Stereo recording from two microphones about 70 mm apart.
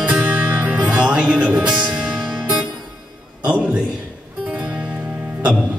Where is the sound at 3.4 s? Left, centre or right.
Centre.